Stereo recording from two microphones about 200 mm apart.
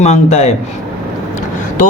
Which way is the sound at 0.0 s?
35° left (ahead or behind).